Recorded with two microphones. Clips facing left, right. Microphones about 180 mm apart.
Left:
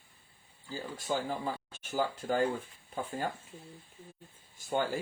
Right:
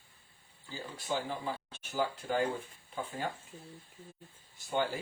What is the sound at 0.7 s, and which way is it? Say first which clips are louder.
Speech: left 2 dB; 45° left (ahead or behind).